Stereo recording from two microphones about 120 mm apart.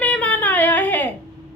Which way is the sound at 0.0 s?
15° left (ahead or behind).